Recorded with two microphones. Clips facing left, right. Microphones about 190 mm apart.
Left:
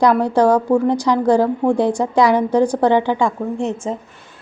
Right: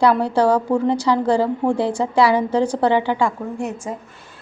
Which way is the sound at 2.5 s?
15° left (ahead or behind).